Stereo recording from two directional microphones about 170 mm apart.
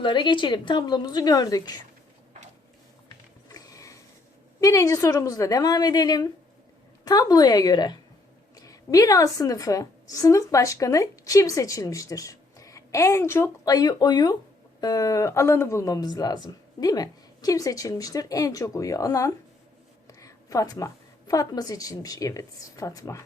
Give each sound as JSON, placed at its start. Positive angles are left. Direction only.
{"t": 0.0, "sound": "speech", "side_deg": 25}
{"t": 3.5, "sound": "a sound", "side_deg": 20}
{"t": 4.6, "sound": "a woman's voice", "side_deg": 20}